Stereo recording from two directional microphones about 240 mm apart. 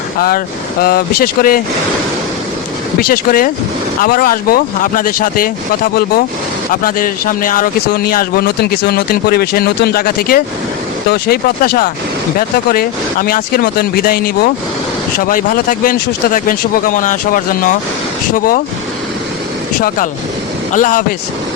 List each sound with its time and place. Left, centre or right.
0.2 s speech: left
3.0 s speech: left
20.7 s speech: left